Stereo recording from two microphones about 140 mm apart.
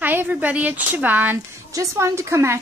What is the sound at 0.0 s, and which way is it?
A woman's voice, 15° right (ahead or behind).